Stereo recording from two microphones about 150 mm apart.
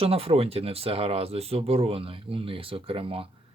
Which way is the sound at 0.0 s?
40° right (ahead or behind).